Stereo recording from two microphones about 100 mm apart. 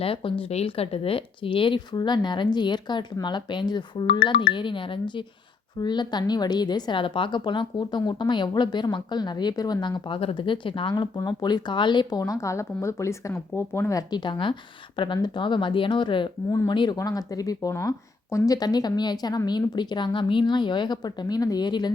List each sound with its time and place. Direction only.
0.0 s speech: 65° left (ahead or behind)
11.2 s speech: 45° left (ahead or behind)
12.2 s speech: 30° left (ahead or behind)
14.1 s speech: 55° left (ahead or behind)
17.0 s speech: 40° left (ahead or behind)